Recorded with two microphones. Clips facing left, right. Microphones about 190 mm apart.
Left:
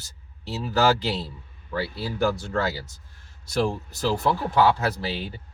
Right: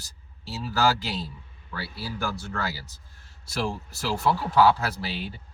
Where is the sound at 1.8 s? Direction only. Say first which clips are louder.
Left 7 dB; 25° left (ahead or behind).